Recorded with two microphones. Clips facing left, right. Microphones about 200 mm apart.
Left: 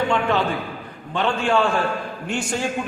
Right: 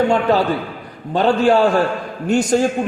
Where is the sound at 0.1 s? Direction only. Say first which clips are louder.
Right 5 dB; 35° right (ahead or behind).